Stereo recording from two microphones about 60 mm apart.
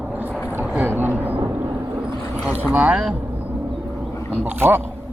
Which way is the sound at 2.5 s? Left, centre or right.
Right.